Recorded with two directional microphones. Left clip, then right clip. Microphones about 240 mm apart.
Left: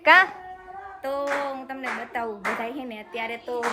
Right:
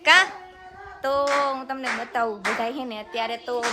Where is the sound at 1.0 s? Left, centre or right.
Centre.